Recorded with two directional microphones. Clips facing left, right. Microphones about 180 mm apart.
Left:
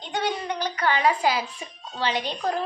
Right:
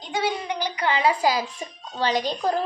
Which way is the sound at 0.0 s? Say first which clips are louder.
Right 1 dB; 5° right (ahead or behind).